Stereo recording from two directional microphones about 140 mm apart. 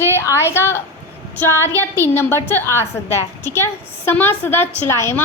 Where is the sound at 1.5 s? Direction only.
15° left (ahead or behind).